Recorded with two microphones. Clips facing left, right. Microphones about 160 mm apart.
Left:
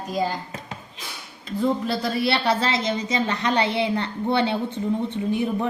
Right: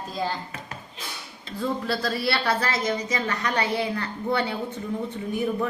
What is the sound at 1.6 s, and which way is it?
A woman's voice, 20° left (ahead or behind).